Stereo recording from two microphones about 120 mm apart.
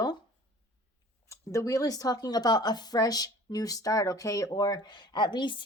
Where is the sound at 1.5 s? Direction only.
25° left (ahead or behind).